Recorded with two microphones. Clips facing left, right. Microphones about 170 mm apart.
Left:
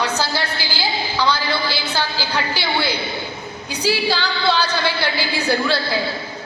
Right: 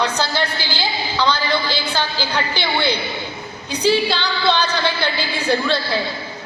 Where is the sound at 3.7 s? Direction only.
10° left (ahead or behind).